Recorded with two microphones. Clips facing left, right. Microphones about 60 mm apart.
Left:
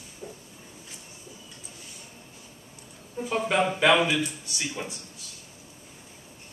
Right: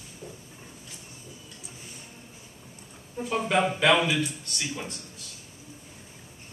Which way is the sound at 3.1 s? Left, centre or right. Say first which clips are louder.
Even; centre.